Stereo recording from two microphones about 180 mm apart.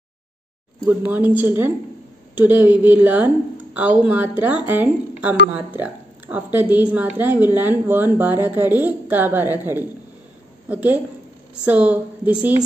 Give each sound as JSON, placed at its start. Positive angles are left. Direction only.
{"t": 0.8, "sound": "a woman's voice", "side_deg": -10}
{"t": 10.7, "sound": "a woman's voice", "side_deg": -10}